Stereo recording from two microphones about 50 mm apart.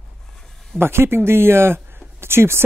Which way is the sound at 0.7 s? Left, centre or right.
Right.